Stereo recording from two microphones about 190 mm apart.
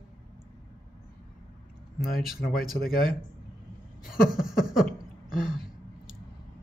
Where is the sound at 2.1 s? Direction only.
50° left (ahead or behind).